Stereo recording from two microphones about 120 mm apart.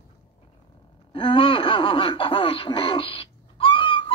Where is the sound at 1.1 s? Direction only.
45° left (ahead or behind).